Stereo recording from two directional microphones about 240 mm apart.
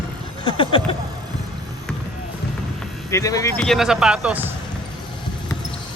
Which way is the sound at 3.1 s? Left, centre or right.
Centre.